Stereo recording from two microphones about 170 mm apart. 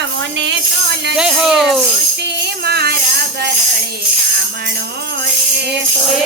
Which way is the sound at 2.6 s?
70° right (ahead or behind).